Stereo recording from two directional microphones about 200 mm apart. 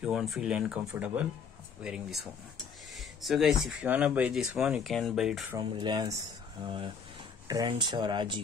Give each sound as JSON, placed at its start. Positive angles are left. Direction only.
{"t": 0.0, "sound": "speech", "side_deg": 0}
{"t": 5.6, "sound": "speech", "side_deg": -20}